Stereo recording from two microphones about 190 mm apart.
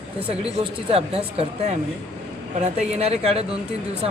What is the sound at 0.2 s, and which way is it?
A woman's voice, 30° right (ahead or behind).